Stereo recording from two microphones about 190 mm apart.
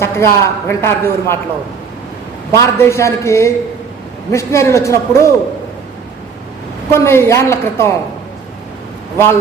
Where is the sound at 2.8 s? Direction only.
15° left (ahead or behind).